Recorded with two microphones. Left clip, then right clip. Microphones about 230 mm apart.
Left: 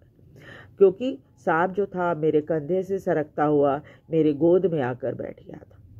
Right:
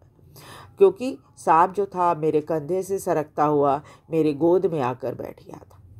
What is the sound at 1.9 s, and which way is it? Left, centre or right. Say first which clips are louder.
Speech: right 2 dB; right.